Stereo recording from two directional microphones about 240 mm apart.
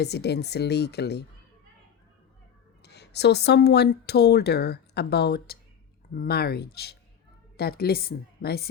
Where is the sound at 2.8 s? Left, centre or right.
Left.